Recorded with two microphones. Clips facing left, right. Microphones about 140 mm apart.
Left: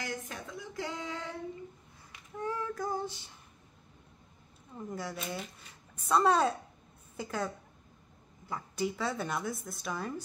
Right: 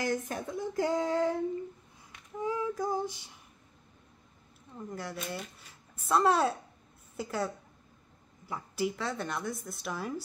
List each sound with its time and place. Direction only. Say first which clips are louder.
0.0 s speech: right 7 dB; 45° right (ahead or behind)
2.3 s female singing: right 3 dB; 10° right (ahead or behind)
4.7 s a woman's voice: even; centre (ahead or behind)